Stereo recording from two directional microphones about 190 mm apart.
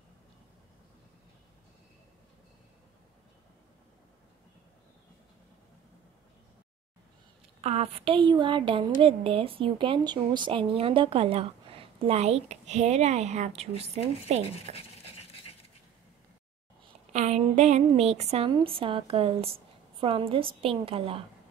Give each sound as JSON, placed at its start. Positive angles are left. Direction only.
{"t": 7.6, "sound": "a woman's voice", "side_deg": -35}
{"t": 14.7, "sound": "a sound", "side_deg": 30}
{"t": 17.1, "sound": "a woman's voice", "side_deg": -35}